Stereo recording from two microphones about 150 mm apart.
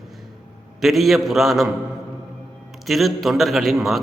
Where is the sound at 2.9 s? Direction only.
Centre (ahead or behind).